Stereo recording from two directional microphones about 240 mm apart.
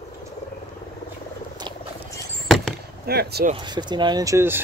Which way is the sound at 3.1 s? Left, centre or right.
Right.